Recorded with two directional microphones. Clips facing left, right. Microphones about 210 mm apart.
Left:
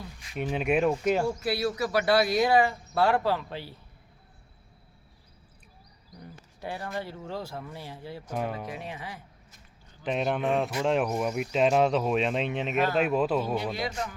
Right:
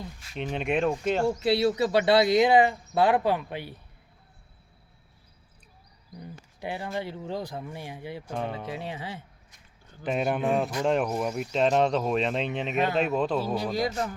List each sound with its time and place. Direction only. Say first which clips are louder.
0.3 s speech: left 1 dB; 5° left (ahead or behind)
1.4 s speech: right 5 dB; 25° right (ahead or behind)
6.6 s speech: right 2 dB; 15° right (ahead or behind)
8.3 s speech: left 1 dB; 5° left (ahead or behind)
8.6 s speech: right 3 dB; 30° right (ahead or behind)
10.0 s speech: right 1 dB; 5° right (ahead or behind)
13.6 s a man's voice: right 4 dB; 40° right (ahead or behind)